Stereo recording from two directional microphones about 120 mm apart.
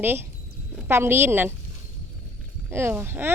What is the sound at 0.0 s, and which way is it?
Speech, 20° right (ahead or behind).